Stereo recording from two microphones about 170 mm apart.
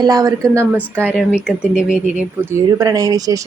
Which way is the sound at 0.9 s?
5° right (ahead or behind).